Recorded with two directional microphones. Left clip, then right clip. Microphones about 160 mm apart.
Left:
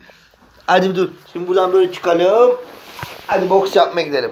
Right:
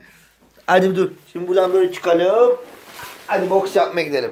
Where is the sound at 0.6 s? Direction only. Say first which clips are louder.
Left 1 dB; 55° right (ahead or behind).